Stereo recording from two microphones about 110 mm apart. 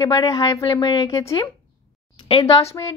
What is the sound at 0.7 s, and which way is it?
Speech, 40° left (ahead or behind).